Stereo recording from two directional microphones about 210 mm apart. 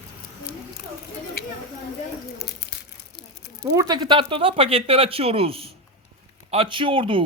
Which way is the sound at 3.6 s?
15° right (ahead or behind).